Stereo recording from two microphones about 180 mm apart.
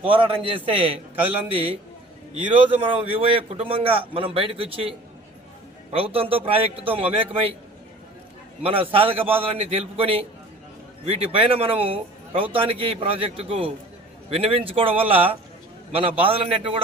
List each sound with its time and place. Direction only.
0.0 s speech: 30° right (ahead or behind)
8.6 s speech: 30° right (ahead or behind)